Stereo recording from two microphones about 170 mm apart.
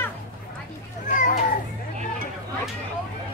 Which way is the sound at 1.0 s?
50° left (ahead or behind).